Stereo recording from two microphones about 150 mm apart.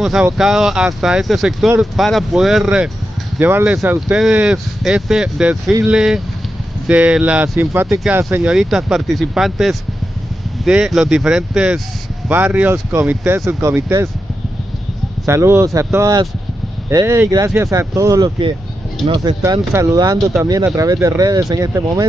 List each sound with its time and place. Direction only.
0.0 s speech: centre (ahead or behind); by 4.0 s 15° right (ahead or behind)
4.1 s speech: 5° right (ahead or behind)
15.2 s speech: 15° right (ahead or behind)